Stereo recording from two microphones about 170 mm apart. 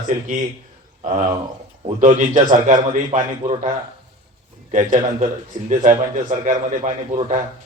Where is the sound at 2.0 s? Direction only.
45° right (ahead or behind).